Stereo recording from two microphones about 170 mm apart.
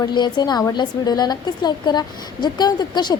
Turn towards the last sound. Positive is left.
turn(degrees=25)  # may be behind; listen again after turning